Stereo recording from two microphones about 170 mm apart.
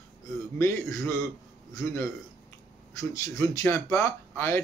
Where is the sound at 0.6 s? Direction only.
15° left (ahead or behind).